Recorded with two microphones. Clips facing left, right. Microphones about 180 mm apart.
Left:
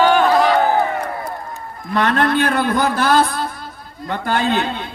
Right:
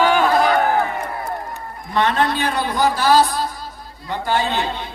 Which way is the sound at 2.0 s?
55° left (ahead or behind).